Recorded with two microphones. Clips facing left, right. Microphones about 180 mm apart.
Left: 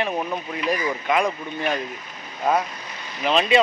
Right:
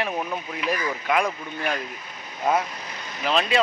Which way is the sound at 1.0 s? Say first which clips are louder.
Left 1 dB; centre (ahead or behind).